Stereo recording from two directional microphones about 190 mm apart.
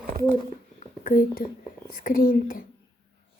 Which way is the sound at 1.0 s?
50° left (ahead or behind).